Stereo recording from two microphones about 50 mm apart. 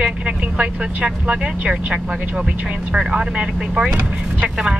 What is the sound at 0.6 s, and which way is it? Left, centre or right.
Speech, right.